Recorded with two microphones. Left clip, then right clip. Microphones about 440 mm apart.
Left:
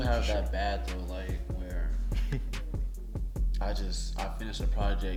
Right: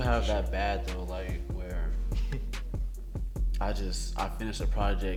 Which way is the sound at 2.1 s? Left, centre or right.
Centre.